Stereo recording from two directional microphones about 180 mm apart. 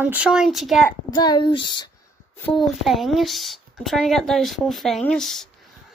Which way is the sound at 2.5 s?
Centre (ahead or behind).